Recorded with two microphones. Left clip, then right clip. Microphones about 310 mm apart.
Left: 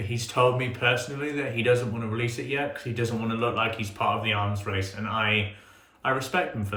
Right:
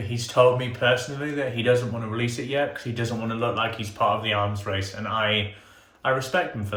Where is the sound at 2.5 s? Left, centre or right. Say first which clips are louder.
Right 3 dB; centre.